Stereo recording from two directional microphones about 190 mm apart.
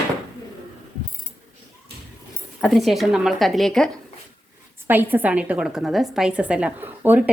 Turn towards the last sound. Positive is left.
turn(degrees=-10)  # may be behind; listen again after turning